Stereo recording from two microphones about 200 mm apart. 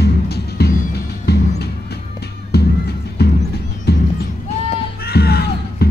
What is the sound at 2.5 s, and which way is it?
Music, 55° left (ahead or behind).